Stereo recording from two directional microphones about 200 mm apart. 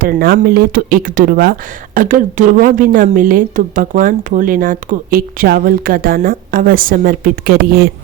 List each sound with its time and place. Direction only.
0.0 s a woman's voice: 50° right (ahead or behind)